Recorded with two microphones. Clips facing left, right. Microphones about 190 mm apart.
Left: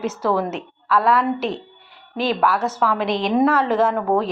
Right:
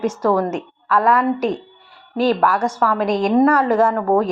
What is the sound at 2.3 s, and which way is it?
A woman's voice, 5° left (ahead or behind).